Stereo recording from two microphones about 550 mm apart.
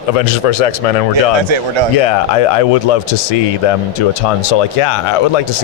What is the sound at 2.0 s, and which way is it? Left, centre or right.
A man's voice, left.